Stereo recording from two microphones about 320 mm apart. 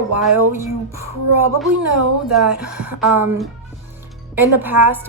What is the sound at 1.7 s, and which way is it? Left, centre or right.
Speech, right.